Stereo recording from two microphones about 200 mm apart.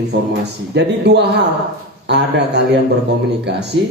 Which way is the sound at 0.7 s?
60° right (ahead or behind).